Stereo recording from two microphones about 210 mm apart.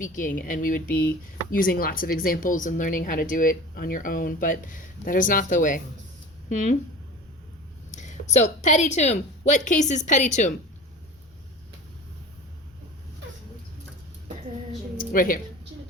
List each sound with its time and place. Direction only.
0.0 s speech: 40° left (ahead or behind)
7.9 s a woman's voice: 35° left (ahead or behind)
14.9 s a sound: 40° left (ahead or behind)